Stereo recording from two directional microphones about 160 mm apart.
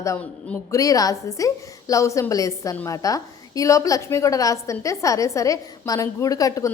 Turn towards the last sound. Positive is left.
turn(degrees=20)  # may be behind; listen again after turning